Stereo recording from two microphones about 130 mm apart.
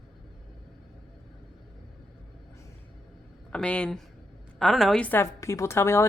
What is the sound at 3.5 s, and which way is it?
A woman's voice, 10° left (ahead or behind).